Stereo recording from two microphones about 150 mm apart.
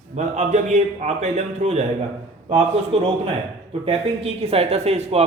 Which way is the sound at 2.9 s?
45° right (ahead or behind).